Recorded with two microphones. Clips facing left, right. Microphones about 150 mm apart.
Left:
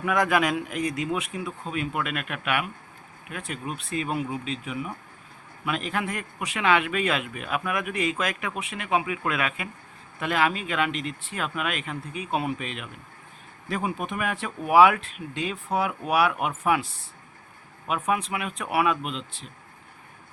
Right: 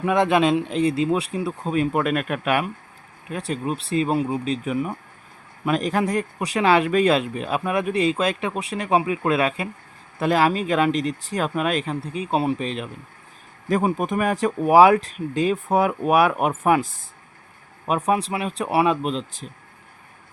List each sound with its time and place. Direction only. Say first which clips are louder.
0.0 s speech: right 5 dB; 25° right (ahead or behind)